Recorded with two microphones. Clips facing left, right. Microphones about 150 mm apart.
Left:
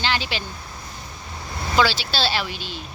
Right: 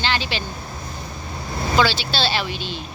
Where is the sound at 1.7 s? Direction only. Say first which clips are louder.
Right 1 dB; 10° left (ahead or behind).